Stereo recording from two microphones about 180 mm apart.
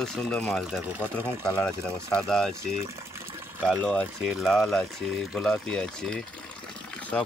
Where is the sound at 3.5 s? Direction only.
5° right (ahead or behind).